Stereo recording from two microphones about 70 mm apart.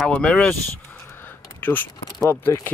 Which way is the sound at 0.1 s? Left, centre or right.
Centre.